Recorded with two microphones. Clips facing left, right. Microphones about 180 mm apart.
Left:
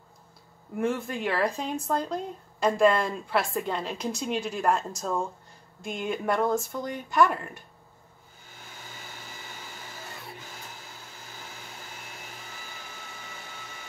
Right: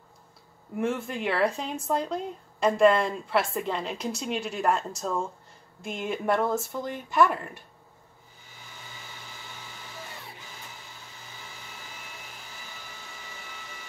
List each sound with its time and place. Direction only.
0.7 s speech: centre (ahead or behind)